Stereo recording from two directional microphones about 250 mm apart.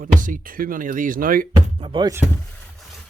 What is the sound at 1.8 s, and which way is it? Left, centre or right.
Speech, centre.